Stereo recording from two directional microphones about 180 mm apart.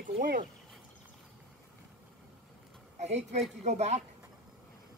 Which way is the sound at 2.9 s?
40° right (ahead or behind).